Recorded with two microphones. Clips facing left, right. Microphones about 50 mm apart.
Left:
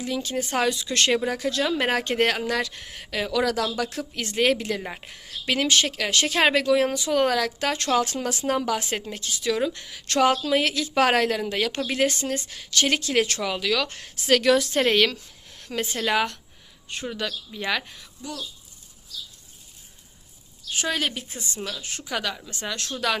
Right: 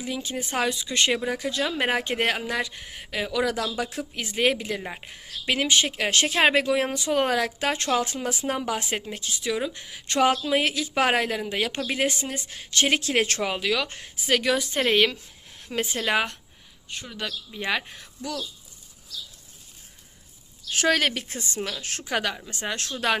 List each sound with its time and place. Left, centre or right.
0.0 s speech: centre
3.8 s speech: centre
6.0 s speech: right
7.9 s speech: centre
12.5 s a woman's voice: right
14.3 s speech: centre
14.9 s speech: centre
17.2 s speech: centre
17.8 s a woman's voice: right
20.7 s a woman's voice: right